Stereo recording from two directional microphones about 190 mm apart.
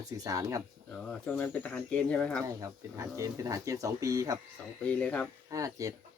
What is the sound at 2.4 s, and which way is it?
Speech, 15° right (ahead or behind).